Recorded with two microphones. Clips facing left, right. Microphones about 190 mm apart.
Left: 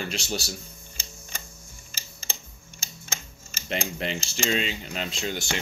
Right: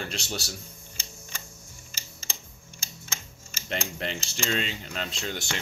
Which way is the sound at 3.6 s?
10° left (ahead or behind).